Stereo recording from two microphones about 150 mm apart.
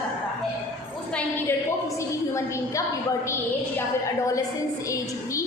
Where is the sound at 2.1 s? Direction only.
20° left (ahead or behind).